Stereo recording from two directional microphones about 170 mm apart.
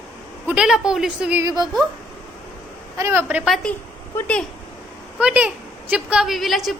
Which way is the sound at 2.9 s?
15° right (ahead or behind).